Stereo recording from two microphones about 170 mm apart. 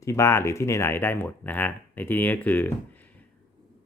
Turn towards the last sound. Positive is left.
turn(degrees=10)  # may be behind; listen again after turning